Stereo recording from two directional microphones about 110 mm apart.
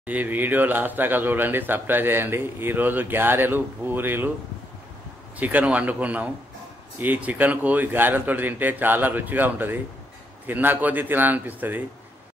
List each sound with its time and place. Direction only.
0.0 s speech: 15° right (ahead or behind)
5.4 s speech: 15° right (ahead or behind)